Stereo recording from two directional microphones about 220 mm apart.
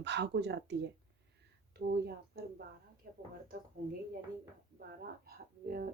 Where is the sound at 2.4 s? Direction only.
45° right (ahead or behind).